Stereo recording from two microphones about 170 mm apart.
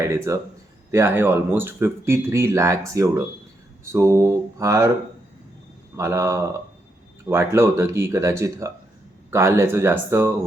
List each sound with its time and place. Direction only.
0.0 s speech: 15° right (ahead or behind)
6.0 s speech: 15° right (ahead or behind)